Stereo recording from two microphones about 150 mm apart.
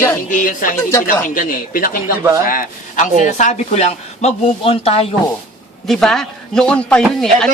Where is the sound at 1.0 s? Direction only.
70° left (ahead or behind).